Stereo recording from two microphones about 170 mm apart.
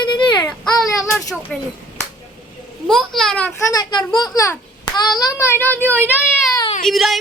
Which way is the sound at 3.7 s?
25° left (ahead or behind).